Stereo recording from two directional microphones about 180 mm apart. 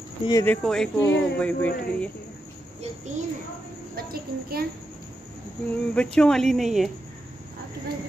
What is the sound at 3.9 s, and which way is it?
Speech, 60° right (ahead or behind).